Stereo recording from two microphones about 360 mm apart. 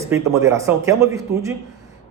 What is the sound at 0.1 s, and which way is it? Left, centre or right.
Speech, centre.